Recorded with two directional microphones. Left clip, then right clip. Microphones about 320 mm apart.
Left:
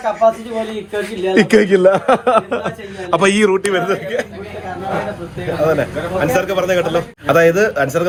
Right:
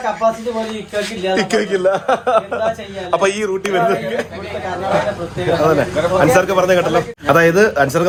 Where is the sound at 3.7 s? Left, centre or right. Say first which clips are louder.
Right 1 dB; centre.